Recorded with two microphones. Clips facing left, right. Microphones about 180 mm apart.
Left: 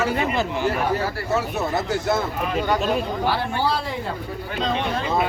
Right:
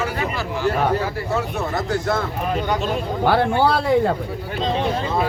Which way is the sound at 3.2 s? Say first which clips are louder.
Right 9 dB; 55° right (ahead or behind).